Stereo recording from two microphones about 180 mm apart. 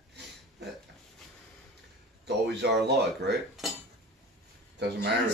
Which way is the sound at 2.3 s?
70° right (ahead or behind).